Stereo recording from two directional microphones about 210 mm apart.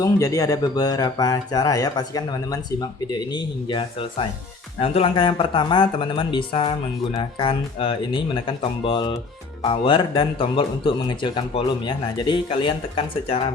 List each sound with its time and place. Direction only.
0.0 s speech: 15° left (ahead or behind)